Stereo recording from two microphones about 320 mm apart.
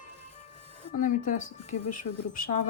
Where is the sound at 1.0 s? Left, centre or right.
Left.